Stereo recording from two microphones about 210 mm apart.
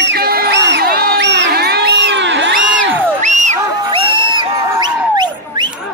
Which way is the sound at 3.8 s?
25° right (ahead or behind).